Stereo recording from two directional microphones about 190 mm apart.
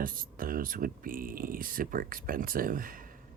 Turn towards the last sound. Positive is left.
turn(degrees=-45)  # may be behind; listen again after turning